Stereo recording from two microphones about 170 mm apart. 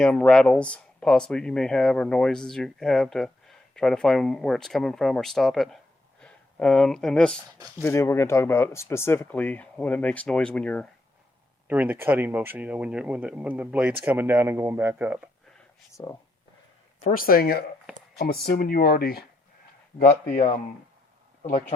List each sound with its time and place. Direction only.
0.0 s speech: 5° left (ahead or behind)
7.8 s speech: 15° left (ahead or behind)
11.7 s speech: 10° right (ahead or behind)
16.0 s speech: 20° left (ahead or behind)
17.2 s speech: 60° left (ahead or behind)
20.0 s speech: 50° left (ahead or behind)